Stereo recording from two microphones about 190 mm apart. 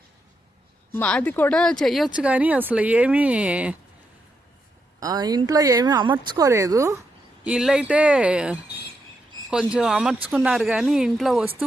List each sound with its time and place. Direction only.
0.9 s speech: 10° left (ahead or behind)
4.9 s speech: 20° right (ahead or behind)
7.4 s speech: 5° right (ahead or behind)
9.7 s speech: 5° right (ahead or behind)